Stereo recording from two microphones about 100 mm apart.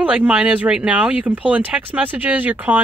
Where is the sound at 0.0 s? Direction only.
10° right (ahead or behind).